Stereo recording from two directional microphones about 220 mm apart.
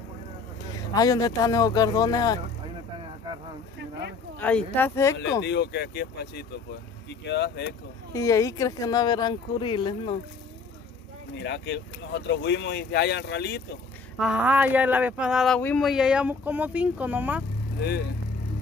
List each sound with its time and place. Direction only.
0.9 s speech: 15° left (ahead or behind)
4.4 s speech: 5° left (ahead or behind)
5.4 s speech: 50° left (ahead or behind)
8.1 s speech: 15° left (ahead or behind)
11.4 s speech: 55° left (ahead or behind)
14.2 s speech: 5° right (ahead or behind)
17.7 s speech: 45° left (ahead or behind)